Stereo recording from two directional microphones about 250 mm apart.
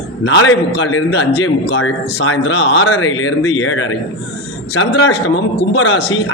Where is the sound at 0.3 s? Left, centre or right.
Left.